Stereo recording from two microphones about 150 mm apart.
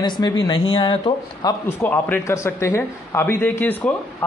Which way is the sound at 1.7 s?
10° left (ahead or behind).